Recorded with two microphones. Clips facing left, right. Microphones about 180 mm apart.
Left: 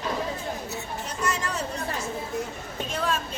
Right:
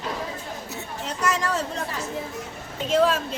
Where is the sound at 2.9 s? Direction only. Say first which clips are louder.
Right 9 dB; 90° right.